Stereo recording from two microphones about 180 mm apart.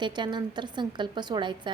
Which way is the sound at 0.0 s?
25° right (ahead or behind).